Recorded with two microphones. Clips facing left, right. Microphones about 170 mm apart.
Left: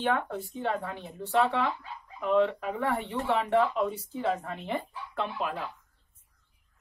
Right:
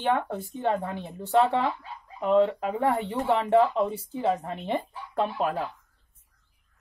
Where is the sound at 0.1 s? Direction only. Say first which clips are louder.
Right 3 dB; 40° right (ahead or behind).